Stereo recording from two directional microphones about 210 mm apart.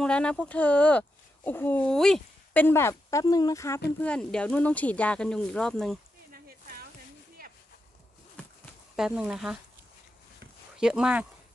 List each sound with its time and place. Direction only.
0.0 s speech: 5° left (ahead or behind)
8.9 s speech: 5° right (ahead or behind)
10.8 s speech: 5° right (ahead or behind)